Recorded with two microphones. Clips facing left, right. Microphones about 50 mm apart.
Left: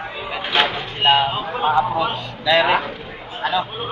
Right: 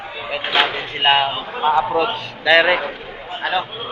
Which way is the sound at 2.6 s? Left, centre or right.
Right.